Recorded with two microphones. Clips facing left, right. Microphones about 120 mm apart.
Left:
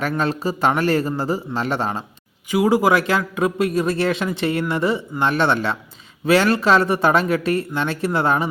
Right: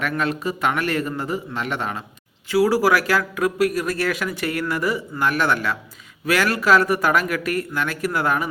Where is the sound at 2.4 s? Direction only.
20° left (ahead or behind).